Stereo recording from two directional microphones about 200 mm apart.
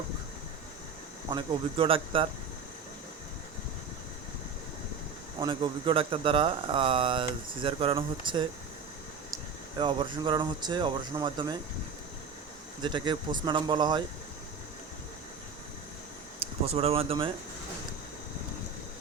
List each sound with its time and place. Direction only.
1.3 s speech: 25° right (ahead or behind)
5.4 s speech: 25° right (ahead or behind)
9.7 s speech: 25° right (ahead or behind)
12.8 s speech: 25° right (ahead or behind)
16.4 s speech: 30° right (ahead or behind)